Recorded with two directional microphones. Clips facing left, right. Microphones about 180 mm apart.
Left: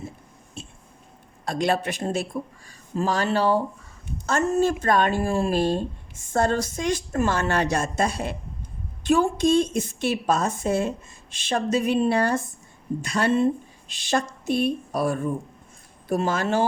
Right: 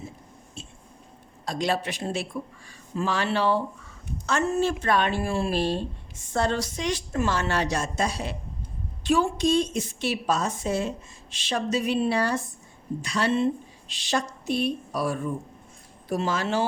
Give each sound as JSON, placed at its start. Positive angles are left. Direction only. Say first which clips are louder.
{"t": 1.5, "sound": "speech", "louder": "left 3 dB", "side_deg": 55}